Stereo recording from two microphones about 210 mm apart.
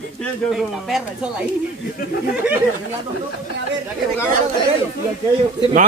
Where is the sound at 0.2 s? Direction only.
Centre (ahead or behind).